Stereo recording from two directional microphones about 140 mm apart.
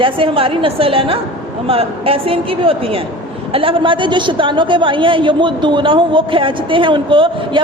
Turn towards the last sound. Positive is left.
turn(degrees=-35)  # may be behind; listen again after turning